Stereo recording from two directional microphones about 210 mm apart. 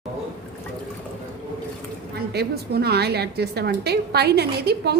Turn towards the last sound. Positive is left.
turn(degrees=-50)  # may be behind; listen again after turning